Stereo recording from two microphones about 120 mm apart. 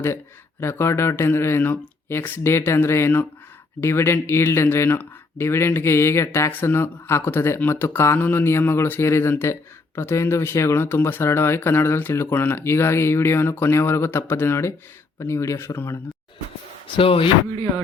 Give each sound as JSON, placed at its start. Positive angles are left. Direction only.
{"t": 0.6, "sound": "speech", "side_deg": 20}
{"t": 17.0, "sound": "speech", "side_deg": 50}